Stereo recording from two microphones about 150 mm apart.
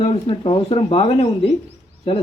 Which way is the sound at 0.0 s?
40° left (ahead or behind).